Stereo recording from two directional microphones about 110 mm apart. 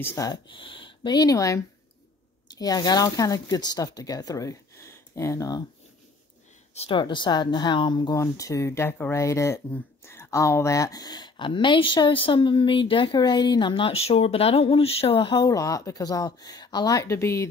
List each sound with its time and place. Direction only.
0.2 s speech: 45° left (ahead or behind); by 5.6 s 30° left (ahead or behind)
6.9 s speech: 45° left (ahead or behind)
8.2 s speech: 30° left (ahead or behind)
9.1 s speech: 25° left (ahead or behind); by 15.4 s 50° left (ahead or behind)
15.4 s speech: 30° left (ahead or behind)